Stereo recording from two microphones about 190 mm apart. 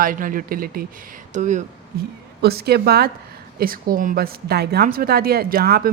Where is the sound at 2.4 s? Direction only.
55° right (ahead or behind).